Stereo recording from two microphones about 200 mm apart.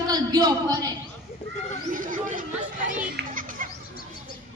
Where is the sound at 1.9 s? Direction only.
40° right (ahead or behind).